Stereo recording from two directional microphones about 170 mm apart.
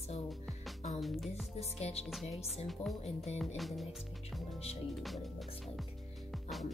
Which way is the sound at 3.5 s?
Centre (ahead or behind).